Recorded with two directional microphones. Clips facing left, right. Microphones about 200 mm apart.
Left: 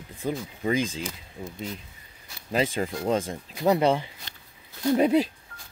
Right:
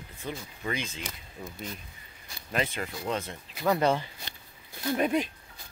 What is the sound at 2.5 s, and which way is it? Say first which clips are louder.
Speech: left 6 dB; 30° left (ahead or behind).